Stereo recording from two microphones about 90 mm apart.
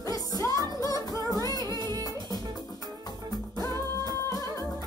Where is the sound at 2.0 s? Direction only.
45° left (ahead or behind).